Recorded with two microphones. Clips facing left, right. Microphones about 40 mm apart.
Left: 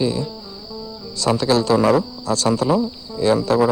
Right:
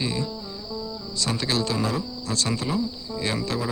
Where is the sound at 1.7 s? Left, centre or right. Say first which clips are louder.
Left 11 dB; left.